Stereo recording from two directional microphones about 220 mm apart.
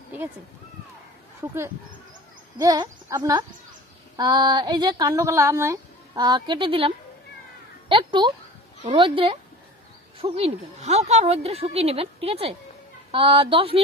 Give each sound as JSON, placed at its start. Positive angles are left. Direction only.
{"t": 1.4, "sound": "speech", "side_deg": -10}
{"t": 7.9, "sound": "speech", "side_deg": -20}